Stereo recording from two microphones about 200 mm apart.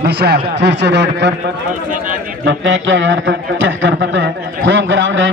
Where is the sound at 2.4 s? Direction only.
70° right (ahead or behind).